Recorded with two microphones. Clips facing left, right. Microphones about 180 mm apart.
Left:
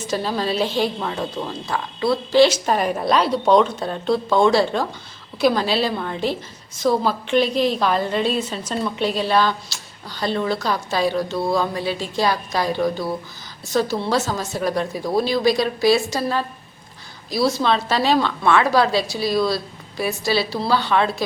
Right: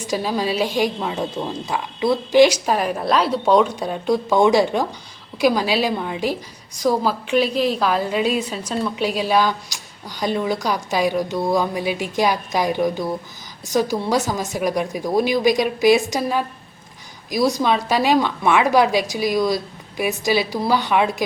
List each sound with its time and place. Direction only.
0.0 s a woman's voice: 10° right (ahead or behind)
2.6 s a woman's voice: centre (ahead or behind)